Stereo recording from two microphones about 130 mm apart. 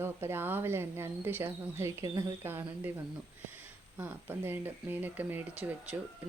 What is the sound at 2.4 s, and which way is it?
Speech, 15° right (ahead or behind).